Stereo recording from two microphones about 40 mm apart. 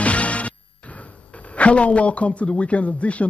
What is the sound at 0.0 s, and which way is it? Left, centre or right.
Speech, left.